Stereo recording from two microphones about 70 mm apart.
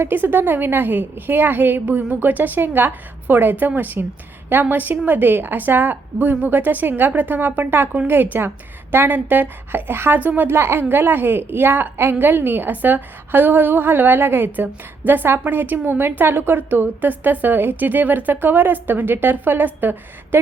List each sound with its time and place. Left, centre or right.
0.0 s a woman's voice: right